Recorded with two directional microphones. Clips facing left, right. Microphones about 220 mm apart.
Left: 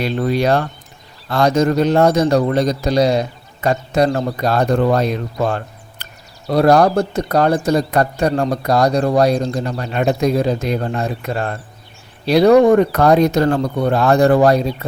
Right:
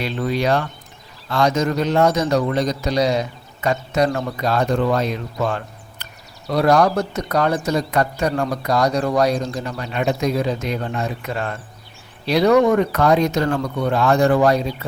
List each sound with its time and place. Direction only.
0.0 s a man's voice: 40° left (ahead or behind)